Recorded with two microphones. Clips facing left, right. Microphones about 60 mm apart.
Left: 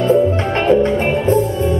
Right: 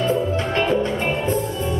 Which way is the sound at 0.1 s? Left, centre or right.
Left.